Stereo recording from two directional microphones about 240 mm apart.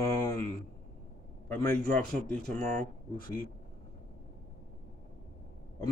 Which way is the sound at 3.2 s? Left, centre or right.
Left.